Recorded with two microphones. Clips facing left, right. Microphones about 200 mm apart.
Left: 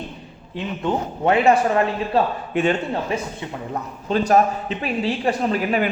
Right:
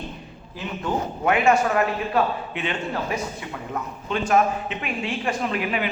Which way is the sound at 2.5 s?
45° left (ahead or behind).